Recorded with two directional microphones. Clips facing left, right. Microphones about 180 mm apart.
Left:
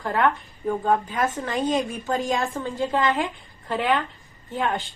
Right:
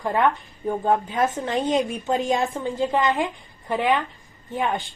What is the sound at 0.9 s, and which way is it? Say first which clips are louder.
A woman's voice: right 2 dB; 25° right (ahead or behind).